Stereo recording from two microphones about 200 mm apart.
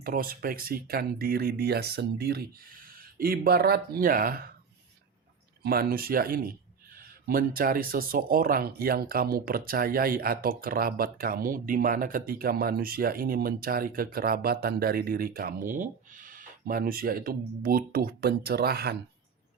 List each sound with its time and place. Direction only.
0.0 s speech: 45° right (ahead or behind)
5.6 s speech: 50° right (ahead or behind)